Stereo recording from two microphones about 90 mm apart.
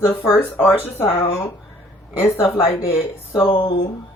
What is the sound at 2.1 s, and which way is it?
Speech, 30° left (ahead or behind).